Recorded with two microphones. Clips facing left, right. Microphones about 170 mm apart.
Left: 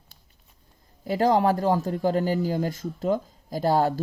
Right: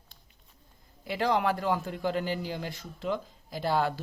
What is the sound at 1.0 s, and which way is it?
A man's voice, 40° left (ahead or behind).